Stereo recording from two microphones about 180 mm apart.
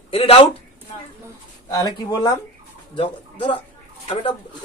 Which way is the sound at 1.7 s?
20° left (ahead or behind).